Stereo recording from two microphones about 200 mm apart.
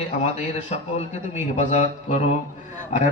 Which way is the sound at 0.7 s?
35° left (ahead or behind).